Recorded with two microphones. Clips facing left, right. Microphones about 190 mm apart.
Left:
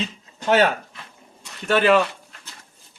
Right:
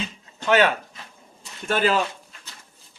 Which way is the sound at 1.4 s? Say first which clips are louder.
Left 3 dB; 70° left (ahead or behind).